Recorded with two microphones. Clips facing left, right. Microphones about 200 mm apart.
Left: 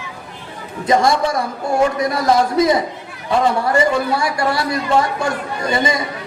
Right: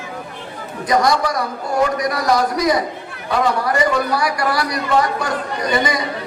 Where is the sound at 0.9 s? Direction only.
25° left (ahead or behind).